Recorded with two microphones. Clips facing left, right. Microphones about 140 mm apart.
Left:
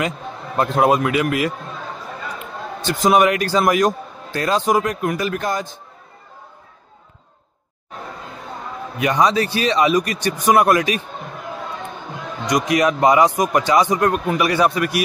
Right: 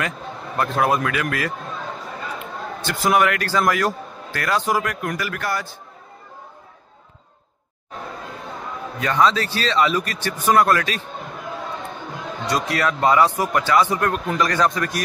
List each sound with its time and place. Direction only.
0.6 s a man's voice: 20° left (ahead or behind)
2.8 s a man's voice: 20° left (ahead or behind)
8.9 s a man's voice: 15° left (ahead or behind)
12.4 s a man's voice: 15° left (ahead or behind)